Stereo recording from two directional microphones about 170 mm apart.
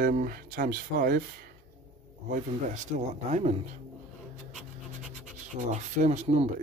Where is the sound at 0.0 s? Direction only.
55° right (ahead or behind).